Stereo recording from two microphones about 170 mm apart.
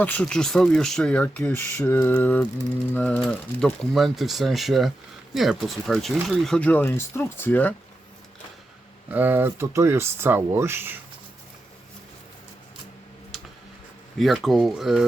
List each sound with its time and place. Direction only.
0.0 s speech: 10° left (ahead or behind)
9.0 s speech: 10° right (ahead or behind)
14.2 s speech: centre (ahead or behind)